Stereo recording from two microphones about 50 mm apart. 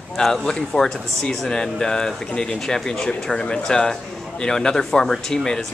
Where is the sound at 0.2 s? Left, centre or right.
Centre.